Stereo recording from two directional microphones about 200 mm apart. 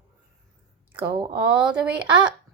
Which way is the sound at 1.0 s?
20° right (ahead or behind).